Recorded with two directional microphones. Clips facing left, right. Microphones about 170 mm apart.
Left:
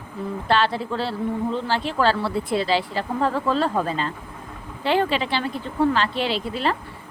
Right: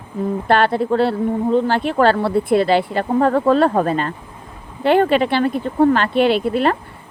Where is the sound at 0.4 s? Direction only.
55° right (ahead or behind).